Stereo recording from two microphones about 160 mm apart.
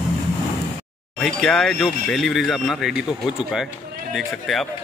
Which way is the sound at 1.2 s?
5° left (ahead or behind).